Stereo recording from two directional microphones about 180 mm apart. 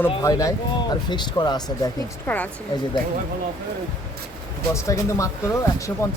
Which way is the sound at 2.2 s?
10° left (ahead or behind).